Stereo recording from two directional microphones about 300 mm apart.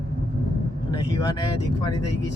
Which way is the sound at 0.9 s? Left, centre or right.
Centre.